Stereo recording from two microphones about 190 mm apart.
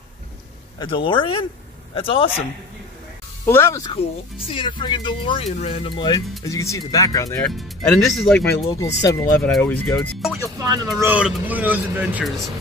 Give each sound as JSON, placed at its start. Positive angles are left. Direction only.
{"t": 0.7, "sound": "speech", "side_deg": 25}
{"t": 3.4, "sound": "speech", "side_deg": 15}
{"t": 4.5, "sound": "speech", "side_deg": 25}
{"t": 7.4, "sound": "speech", "side_deg": 0}
{"t": 9.1, "sound": "speech", "side_deg": 15}
{"t": 10.3, "sound": "speech", "side_deg": -20}